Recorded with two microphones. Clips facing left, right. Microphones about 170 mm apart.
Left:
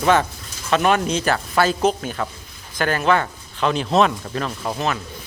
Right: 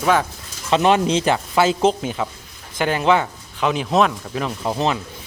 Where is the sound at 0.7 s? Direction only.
20° right (ahead or behind).